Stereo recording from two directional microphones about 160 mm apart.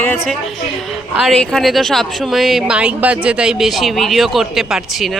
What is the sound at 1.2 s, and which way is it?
A woman's voice, centre (ahead or behind).